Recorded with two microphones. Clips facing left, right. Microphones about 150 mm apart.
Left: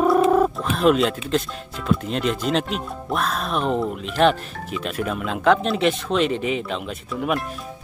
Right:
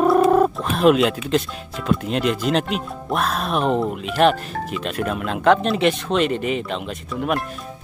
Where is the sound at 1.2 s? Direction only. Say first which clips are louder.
Right 2 dB; centre (ahead or behind).